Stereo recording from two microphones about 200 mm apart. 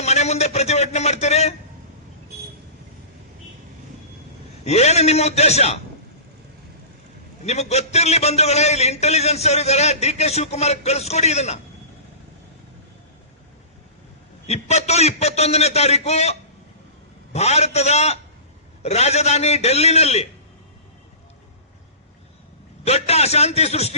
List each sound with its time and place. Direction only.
0.0 s a man's voice: 35° left (ahead or behind)
4.6 s a man's voice: 35° left (ahead or behind)
7.4 s a man's voice: 35° left (ahead or behind)
14.4 s a man's voice: 35° left (ahead or behind)
22.8 s a man's voice: 30° left (ahead or behind)